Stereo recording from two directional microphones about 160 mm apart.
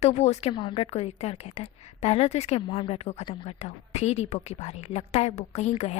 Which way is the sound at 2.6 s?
30° left (ahead or behind).